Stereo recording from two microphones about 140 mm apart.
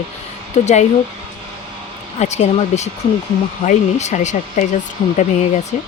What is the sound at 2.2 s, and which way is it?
Speech, 50° left (ahead or behind).